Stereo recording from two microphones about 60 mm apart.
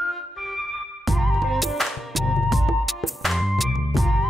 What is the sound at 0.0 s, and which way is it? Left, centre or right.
Music, centre.